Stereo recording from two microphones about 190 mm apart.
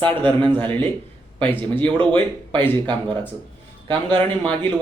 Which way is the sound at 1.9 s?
25° right (ahead or behind).